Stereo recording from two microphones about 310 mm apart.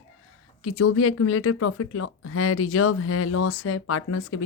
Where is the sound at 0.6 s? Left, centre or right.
Left.